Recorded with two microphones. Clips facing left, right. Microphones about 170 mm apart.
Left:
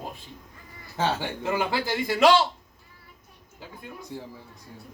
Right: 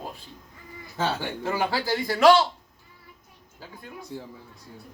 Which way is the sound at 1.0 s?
20° left (ahead or behind).